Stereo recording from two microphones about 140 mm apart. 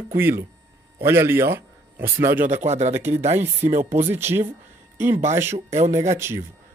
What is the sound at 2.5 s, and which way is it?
Speech, 55° right (ahead or behind).